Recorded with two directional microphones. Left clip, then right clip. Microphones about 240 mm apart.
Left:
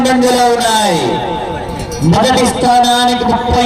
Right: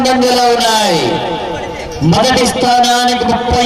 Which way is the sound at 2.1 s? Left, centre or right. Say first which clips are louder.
Even; right.